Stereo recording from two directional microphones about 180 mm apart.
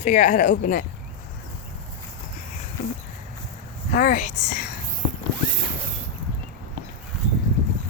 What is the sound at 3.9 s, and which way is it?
Speech, 45° left (ahead or behind).